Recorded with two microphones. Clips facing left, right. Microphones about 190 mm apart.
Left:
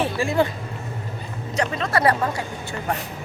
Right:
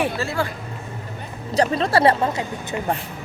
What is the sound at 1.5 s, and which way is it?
A woman's voice, 35° right (ahead or behind).